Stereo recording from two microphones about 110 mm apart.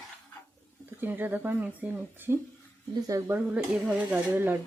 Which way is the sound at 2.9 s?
30° right (ahead or behind).